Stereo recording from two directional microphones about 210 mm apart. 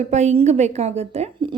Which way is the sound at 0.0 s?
30° right (ahead or behind).